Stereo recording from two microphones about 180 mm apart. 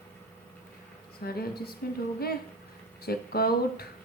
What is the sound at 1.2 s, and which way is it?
Speech, 60° left (ahead or behind).